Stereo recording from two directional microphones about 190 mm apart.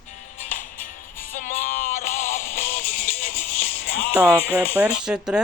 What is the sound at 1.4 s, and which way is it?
Music, 45° left (ahead or behind).